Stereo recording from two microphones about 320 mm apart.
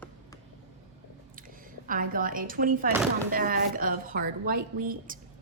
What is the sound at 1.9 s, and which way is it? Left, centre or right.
Speech, right.